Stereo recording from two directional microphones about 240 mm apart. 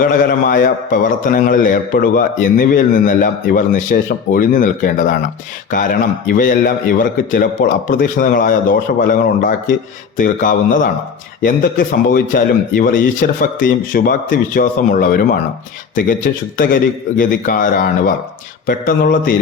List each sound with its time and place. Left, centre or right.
0.0 s a man's voice: left